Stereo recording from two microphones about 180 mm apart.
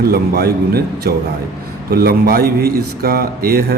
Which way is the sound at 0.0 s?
60° right (ahead or behind).